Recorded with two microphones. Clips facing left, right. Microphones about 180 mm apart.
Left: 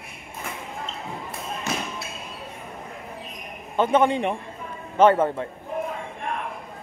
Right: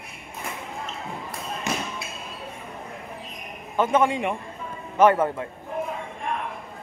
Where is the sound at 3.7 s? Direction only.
30° left (ahead or behind).